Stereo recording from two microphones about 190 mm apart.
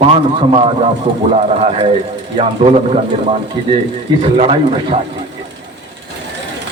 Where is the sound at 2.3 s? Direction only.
30° right (ahead or behind).